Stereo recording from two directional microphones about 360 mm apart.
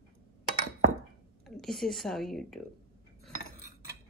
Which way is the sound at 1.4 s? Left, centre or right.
Centre.